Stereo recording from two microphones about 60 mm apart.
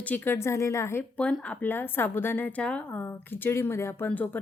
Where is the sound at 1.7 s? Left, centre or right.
Left.